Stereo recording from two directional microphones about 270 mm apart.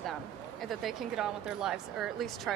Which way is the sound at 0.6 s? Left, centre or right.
Centre.